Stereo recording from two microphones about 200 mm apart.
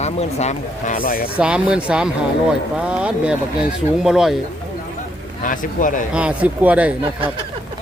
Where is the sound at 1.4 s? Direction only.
5° right (ahead or behind).